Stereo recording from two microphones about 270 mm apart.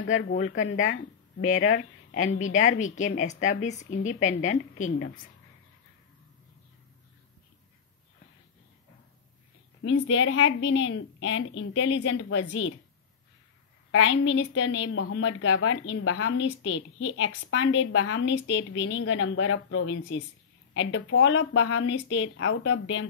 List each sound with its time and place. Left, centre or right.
0.1 s a woman's voice: left
1.7 s a woman's voice: left
9.8 s a woman's voice: left
13.9 s a woman's voice: left